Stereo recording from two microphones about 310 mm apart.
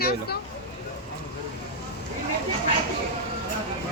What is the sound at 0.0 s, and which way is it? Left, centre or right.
Speech, left.